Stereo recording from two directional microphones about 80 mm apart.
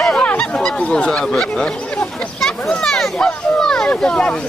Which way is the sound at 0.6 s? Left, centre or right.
Centre.